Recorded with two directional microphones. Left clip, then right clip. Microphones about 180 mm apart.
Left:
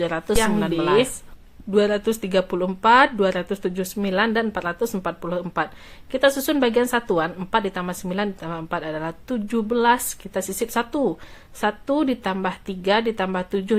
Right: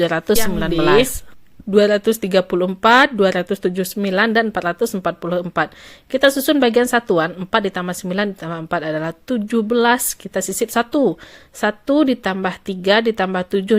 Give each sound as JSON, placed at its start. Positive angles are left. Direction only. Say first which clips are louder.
{"t": 0.0, "sound": "speech", "louder": "right 4 dB", "side_deg": -30}